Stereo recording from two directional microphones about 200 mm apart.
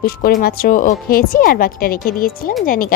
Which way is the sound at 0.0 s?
50° left (ahead or behind).